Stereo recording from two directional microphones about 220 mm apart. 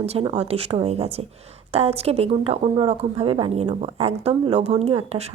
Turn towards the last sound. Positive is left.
turn(degrees=-30)  # may be behind; listen again after turning